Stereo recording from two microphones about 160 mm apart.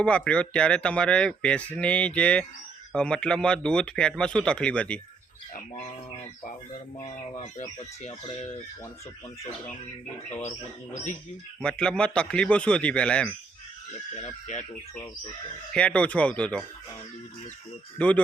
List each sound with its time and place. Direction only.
0.0 s speech: 5° left (ahead or behind)
7.3 s speech: 45° left (ahead or behind)
10.9 s speech: 50° left (ahead or behind)
11.6 s speech: 5° left (ahead or behind)
14.2 s speech: 45° left (ahead or behind)
15.7 s speech: 5° left (ahead or behind)
17.9 s speech: 10° left (ahead or behind)